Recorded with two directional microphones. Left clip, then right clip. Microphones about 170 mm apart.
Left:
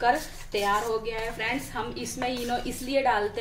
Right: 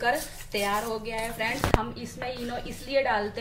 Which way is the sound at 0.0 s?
20° left (ahead or behind).